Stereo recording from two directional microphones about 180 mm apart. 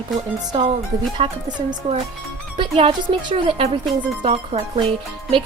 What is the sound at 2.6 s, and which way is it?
Speech, 30° right (ahead or behind).